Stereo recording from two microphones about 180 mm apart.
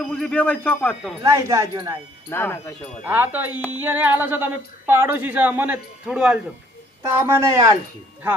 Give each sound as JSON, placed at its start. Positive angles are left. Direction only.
{"t": 0.0, "sound": "speech", "side_deg": 5}
{"t": 1.2, "sound": "speech", "side_deg": -15}
{"t": 2.3, "sound": "speech", "side_deg": 10}
{"t": 3.0, "sound": "speech", "side_deg": -10}
{"t": 7.1, "sound": "speech", "side_deg": -15}